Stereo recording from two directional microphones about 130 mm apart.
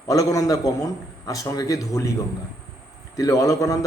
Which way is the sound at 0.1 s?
25° left (ahead or behind).